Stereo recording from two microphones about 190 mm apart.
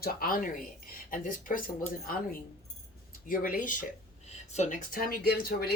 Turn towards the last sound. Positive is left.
turn(degrees=55)  # may be behind; listen again after turning